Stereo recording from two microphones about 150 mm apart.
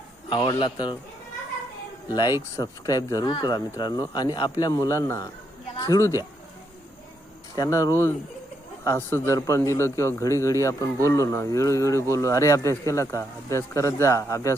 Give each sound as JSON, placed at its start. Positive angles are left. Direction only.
{"t": 0.3, "sound": "speech", "side_deg": 30}
{"t": 2.0, "sound": "speech", "side_deg": 30}
{"t": 5.7, "sound": "a sound", "side_deg": 25}
{"t": 7.5, "sound": "speech", "side_deg": 20}